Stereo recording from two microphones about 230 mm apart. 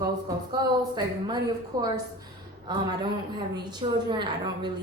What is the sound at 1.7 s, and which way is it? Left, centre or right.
Speech, centre.